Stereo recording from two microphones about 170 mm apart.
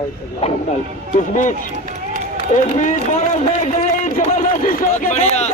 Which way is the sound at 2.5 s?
45° left (ahead or behind).